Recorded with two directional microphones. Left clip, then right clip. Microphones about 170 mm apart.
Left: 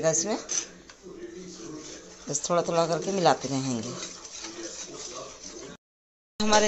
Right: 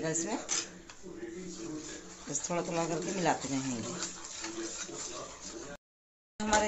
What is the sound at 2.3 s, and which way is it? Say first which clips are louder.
Speech: left 9 dB; 45° left (ahead or behind).